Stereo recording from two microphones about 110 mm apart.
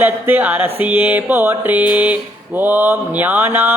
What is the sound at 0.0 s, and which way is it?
Mantra, 15° right (ahead or behind).